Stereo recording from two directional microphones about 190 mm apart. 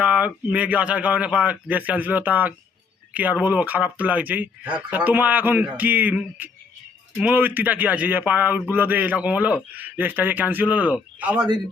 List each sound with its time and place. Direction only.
0.0 s speech: 5° right (ahead or behind)
11.3 s a man's voice: 20° right (ahead or behind)